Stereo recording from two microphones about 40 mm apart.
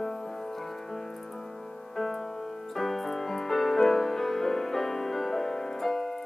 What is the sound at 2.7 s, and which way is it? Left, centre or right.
Music, centre.